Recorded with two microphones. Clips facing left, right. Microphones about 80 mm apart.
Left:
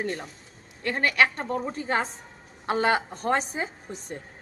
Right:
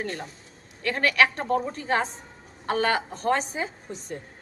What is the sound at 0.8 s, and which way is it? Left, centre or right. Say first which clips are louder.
Speech: right 1 dB; centre.